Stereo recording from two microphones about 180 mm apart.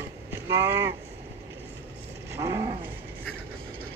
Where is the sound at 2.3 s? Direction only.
20° right (ahead or behind).